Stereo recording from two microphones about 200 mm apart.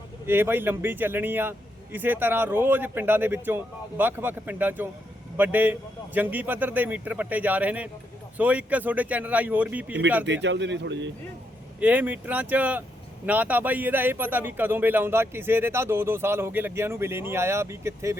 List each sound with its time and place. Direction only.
0.3 s a man's voice: 10° right (ahead or behind)
10.2 s speech: 60° right (ahead or behind)
11.8 s a man's voice: 10° right (ahead or behind)